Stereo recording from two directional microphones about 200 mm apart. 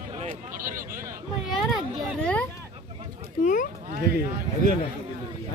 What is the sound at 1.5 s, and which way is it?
Children playing, centre (ahead or behind).